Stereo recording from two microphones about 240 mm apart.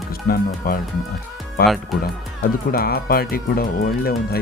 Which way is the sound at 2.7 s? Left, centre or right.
Left.